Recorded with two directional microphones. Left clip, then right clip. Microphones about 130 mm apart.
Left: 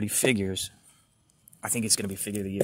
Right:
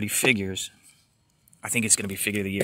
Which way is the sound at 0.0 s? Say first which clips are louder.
Right 3 dB; centre (ahead or behind).